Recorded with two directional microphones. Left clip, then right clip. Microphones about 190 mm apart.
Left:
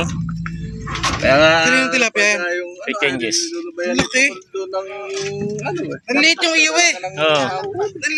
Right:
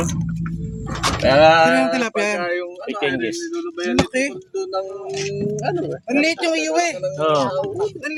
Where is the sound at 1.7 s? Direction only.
55° right (ahead or behind).